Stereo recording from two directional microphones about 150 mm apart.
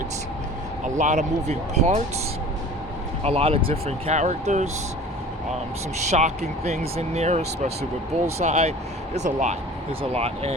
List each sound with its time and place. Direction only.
0.9 s speech: 55° right (ahead or behind)
3.2 s speech: 40° right (ahead or behind)
6.1 s speech: 50° right (ahead or behind)